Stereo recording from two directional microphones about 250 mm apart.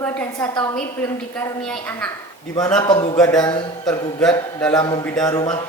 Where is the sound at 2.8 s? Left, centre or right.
Centre.